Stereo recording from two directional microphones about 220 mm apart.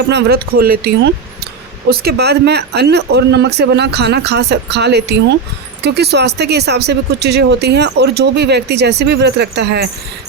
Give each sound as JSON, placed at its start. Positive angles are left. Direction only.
{"t": 0.1, "sound": "speech", "side_deg": -45}